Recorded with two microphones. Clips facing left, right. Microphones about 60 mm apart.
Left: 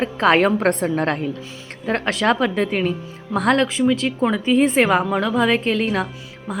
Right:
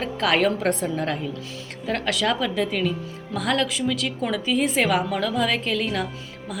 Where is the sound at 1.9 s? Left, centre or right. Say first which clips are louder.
Left 5 dB; left.